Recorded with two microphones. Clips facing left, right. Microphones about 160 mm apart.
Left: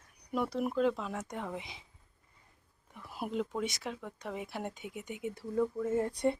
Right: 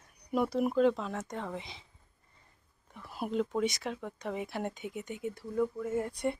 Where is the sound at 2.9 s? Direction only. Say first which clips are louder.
Right 3 dB; 10° left (ahead or behind).